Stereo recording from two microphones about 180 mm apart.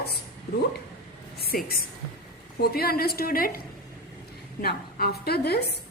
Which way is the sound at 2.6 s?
60° left (ahead or behind).